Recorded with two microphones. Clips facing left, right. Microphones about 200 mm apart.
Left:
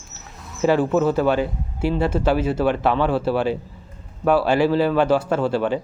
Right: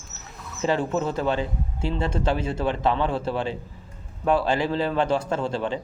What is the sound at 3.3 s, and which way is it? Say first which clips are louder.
Speech: left 6 dB; 20° right (ahead or behind).